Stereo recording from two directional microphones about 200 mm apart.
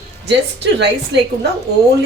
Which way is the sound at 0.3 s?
60° right (ahead or behind).